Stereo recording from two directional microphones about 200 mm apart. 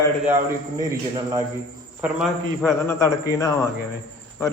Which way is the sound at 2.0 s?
5° right (ahead or behind).